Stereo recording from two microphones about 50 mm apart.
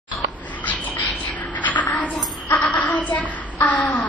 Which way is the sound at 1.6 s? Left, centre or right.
Left.